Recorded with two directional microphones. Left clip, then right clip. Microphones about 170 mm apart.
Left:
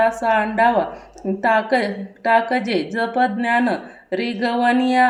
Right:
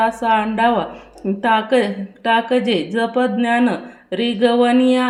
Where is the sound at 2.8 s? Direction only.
20° right (ahead or behind).